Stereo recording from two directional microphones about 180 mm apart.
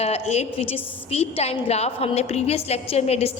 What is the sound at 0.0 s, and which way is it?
A woman's voice, 35° left (ahead or behind).